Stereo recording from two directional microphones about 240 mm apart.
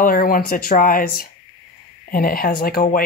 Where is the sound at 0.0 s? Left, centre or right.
Left.